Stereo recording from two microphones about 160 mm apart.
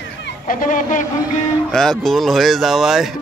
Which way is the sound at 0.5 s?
55° left (ahead or behind).